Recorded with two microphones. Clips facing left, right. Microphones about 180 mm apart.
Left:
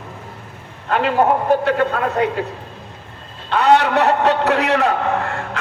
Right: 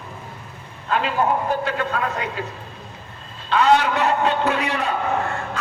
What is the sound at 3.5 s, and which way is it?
A man's voice, 65° left (ahead or behind).